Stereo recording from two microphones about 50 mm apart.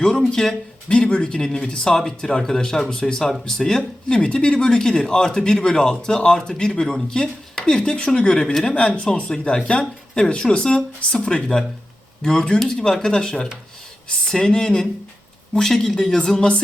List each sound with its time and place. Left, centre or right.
0.0 s speech: centre
0.9 s speech: left